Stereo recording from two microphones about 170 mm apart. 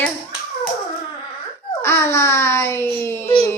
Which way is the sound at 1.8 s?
15° left (ahead or behind).